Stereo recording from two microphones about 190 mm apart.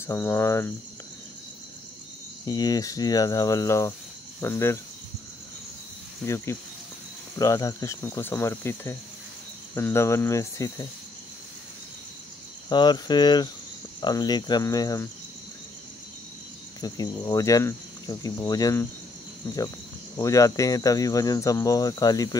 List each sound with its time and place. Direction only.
0.0 s speech: 10° left (ahead or behind)
2.4 s speech: 20° left (ahead or behind)
6.2 s speech: 15° left (ahead or behind)
12.6 s speech: 25° left (ahead or behind)
16.8 s speech: 20° left (ahead or behind)
20.2 s speech: 15° left (ahead or behind)